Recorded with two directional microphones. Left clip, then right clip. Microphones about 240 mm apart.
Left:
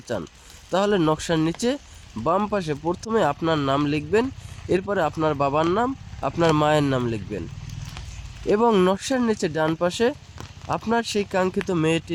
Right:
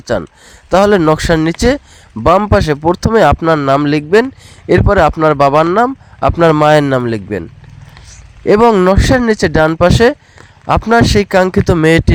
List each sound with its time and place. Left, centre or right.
0.0 s speech: right
8.4 s speech: right